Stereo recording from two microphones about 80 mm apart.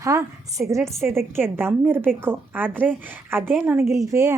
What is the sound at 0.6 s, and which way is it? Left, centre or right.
A woman's voice, right.